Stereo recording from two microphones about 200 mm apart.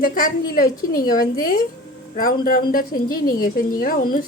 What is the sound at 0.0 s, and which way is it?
A woman's voice, 45° left (ahead or behind).